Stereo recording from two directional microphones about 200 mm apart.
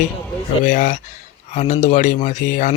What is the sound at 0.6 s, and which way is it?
Speech, 40° left (ahead or behind).